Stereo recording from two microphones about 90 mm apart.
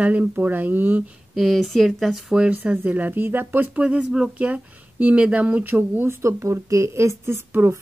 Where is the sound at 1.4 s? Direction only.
Centre (ahead or behind).